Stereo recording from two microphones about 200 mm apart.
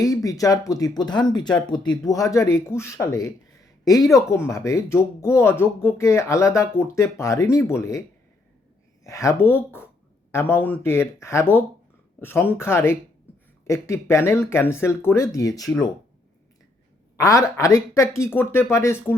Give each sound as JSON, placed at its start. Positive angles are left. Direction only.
{"t": 0.0, "sound": "speech", "side_deg": 15}
{"t": 9.0, "sound": "speech", "side_deg": 15}
{"t": 17.2, "sound": "speech", "side_deg": 15}